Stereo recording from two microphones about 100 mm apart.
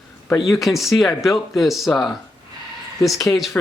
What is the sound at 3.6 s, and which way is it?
Speech, 20° left (ahead or behind).